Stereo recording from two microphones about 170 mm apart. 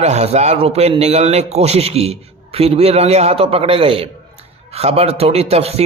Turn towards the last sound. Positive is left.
turn(degrees=-35)  # may be behind; listen again after turning